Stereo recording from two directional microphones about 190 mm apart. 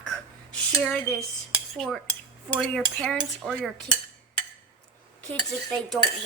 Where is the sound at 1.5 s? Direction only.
Centre (ahead or behind).